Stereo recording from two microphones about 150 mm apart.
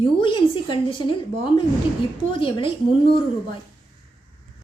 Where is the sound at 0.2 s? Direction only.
35° left (ahead or behind).